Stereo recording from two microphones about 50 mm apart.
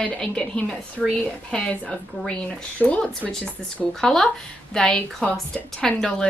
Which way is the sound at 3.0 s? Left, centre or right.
Centre.